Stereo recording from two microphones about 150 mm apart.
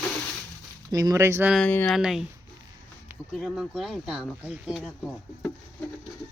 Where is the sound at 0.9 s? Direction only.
25° right (ahead or behind).